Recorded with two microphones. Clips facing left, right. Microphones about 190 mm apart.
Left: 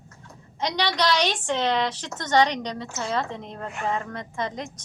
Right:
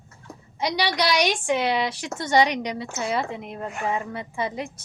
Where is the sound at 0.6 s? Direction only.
10° right (ahead or behind).